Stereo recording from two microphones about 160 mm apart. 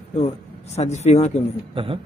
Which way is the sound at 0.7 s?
45° left (ahead or behind).